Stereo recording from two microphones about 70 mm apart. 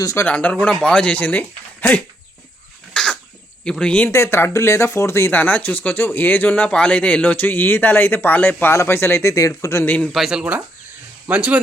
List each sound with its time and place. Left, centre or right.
0.3 s speech: centre
2.9 s a sound: centre
3.6 s speech: centre
4.1 s speech: left
5.3 s speech: left
6.7 s speech: centre
8.7 s speech: left
9.8 s speech: left
10.1 s speech: centre
11.3 s speech: right